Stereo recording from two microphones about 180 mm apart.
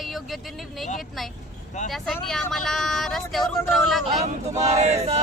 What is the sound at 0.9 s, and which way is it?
Speech, centre (ahead or behind).